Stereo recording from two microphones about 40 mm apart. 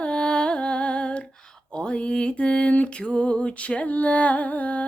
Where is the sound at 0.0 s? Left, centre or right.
Left.